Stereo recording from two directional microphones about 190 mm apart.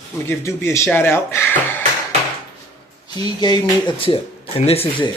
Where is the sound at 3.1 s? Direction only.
20° left (ahead or behind).